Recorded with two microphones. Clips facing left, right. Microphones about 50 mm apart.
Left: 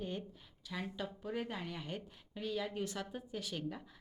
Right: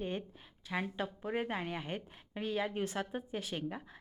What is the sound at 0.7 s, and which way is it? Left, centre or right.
A woman's voice, right.